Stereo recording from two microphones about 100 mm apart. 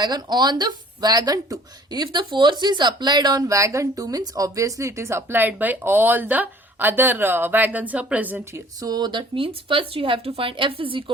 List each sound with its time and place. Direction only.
0.0 s speech: 45° right (ahead or behind); by 8.4 s 15° right (ahead or behind)
8.5 s speech: 40° right (ahead or behind); by 11.0 s 60° right (ahead or behind)